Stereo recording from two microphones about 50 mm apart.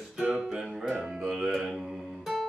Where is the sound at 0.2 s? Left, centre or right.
Right.